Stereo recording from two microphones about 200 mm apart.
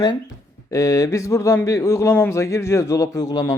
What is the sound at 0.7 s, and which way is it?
A man's voice, 15° left (ahead or behind).